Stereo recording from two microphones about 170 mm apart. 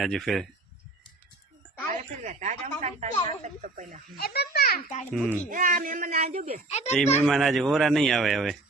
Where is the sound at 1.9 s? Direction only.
45° right (ahead or behind).